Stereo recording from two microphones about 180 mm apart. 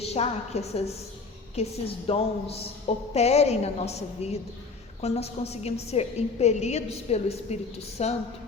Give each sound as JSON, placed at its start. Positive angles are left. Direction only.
{"t": 0.0, "sound": "a woman's voice", "side_deg": 35}